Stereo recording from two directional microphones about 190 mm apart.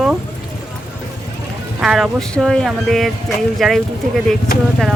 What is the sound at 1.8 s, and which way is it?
Speech, centre (ahead or behind).